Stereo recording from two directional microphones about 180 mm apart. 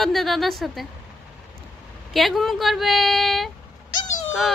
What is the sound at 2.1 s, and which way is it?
Speech, centre (ahead or behind).